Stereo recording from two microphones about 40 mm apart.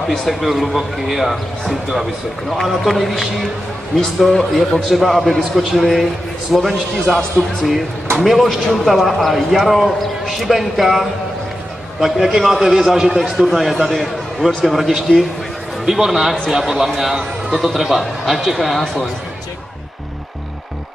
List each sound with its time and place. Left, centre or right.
0.3 s a man's voice: centre
6.5 s a man's voice: centre
8.2 s a man's voice: centre
13.4 s a man's voice: centre